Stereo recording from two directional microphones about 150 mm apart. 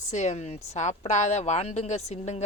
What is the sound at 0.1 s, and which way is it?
A woman's voice, 50° left (ahead or behind).